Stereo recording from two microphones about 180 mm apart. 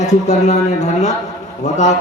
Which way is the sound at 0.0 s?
40° left (ahead or behind).